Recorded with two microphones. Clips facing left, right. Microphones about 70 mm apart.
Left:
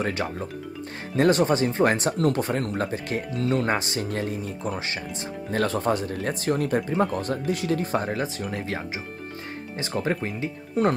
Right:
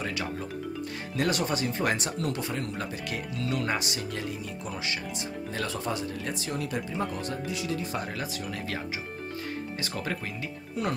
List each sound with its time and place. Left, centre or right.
0.0 s speech: left